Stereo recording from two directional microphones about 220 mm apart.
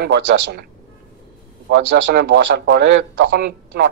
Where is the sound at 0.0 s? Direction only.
45° right (ahead or behind).